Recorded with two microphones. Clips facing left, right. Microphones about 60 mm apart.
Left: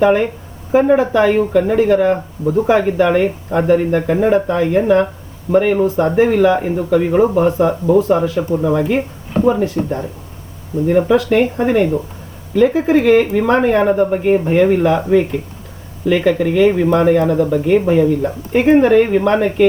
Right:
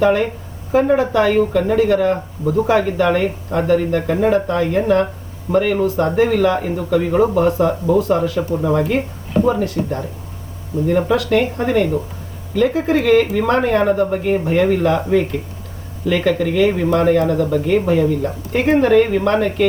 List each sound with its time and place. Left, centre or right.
0.0 s speech: centre